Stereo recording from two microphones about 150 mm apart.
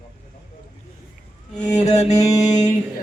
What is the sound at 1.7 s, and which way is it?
Mantra, 50° left (ahead or behind).